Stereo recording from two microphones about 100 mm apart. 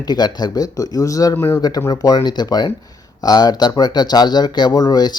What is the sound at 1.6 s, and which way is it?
Speech, 40° left (ahead or behind).